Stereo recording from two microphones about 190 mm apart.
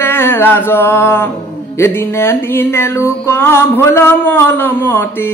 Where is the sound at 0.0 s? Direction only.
10° left (ahead or behind).